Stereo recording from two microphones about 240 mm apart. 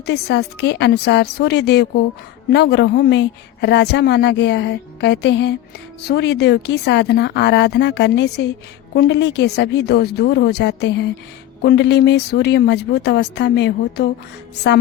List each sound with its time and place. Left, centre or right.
0.0 s a woman's voice: left